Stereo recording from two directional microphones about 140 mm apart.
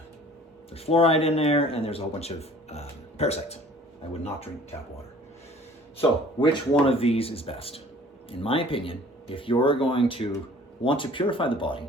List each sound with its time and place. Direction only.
0.7 s speech: 45° left (ahead or behind)
6.0 s speech: 40° left (ahead or behind)